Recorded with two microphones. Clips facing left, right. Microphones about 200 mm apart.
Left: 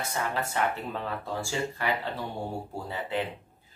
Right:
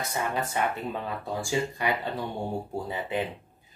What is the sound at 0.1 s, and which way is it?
Speech, 15° right (ahead or behind).